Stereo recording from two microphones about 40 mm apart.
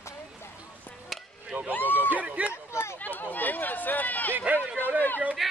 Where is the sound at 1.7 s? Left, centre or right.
Left.